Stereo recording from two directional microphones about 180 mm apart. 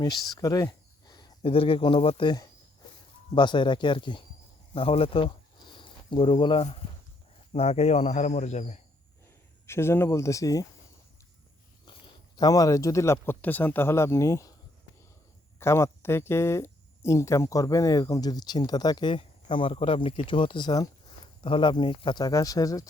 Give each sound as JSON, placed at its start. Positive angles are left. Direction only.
{"t": 0.0, "sound": "a man's voice", "side_deg": 20}
{"t": 9.6, "sound": "speech", "side_deg": 15}
{"t": 11.9, "sound": "speech", "side_deg": 25}
{"t": 15.5, "sound": "speech", "side_deg": 15}